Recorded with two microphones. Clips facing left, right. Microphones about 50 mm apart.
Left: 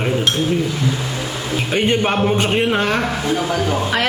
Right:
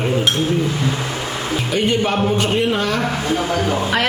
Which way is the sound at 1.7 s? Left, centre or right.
Left.